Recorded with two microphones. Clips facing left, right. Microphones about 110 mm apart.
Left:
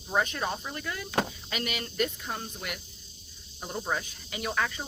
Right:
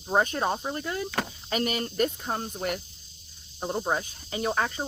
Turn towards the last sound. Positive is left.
turn(degrees=-35)  # may be behind; listen again after turning